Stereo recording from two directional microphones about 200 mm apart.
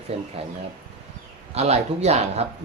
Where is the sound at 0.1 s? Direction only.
30° right (ahead or behind).